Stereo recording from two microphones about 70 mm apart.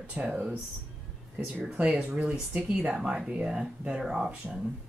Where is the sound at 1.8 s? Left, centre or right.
Right.